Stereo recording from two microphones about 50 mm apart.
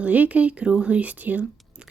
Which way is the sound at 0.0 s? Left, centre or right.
Right.